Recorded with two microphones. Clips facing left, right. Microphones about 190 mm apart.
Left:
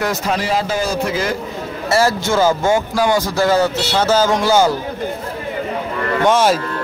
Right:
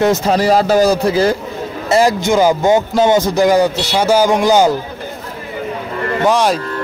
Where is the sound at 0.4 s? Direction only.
40° right (ahead or behind).